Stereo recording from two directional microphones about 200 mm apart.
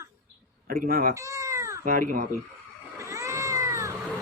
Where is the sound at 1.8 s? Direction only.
45° right (ahead or behind).